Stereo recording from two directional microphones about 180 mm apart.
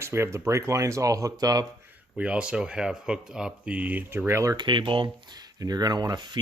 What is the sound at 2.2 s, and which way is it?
Speech, 5° right (ahead or behind).